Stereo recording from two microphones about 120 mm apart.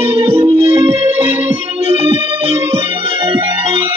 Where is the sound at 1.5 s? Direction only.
50° right (ahead or behind).